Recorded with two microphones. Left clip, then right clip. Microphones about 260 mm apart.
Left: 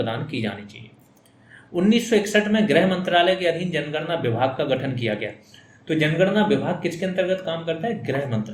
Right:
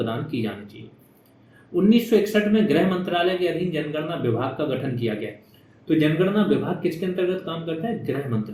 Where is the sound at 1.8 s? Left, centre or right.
Left.